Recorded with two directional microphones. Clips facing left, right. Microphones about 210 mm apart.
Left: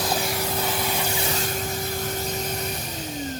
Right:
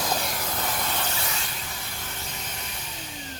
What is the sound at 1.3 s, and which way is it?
Vehicle, 45° left (ahead or behind).